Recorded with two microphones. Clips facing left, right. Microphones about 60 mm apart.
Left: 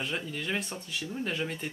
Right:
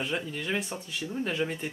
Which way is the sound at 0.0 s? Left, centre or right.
Centre.